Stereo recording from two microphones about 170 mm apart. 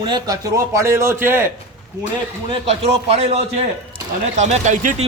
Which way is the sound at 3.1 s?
35° right (ahead or behind).